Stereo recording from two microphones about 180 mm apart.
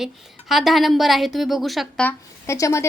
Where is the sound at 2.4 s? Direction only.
15° left (ahead or behind).